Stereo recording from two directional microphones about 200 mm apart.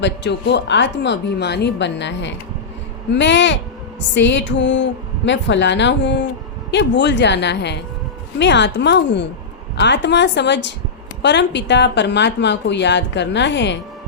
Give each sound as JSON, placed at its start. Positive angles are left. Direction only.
{"t": 0.0, "sound": "a woman's voice", "side_deg": 60}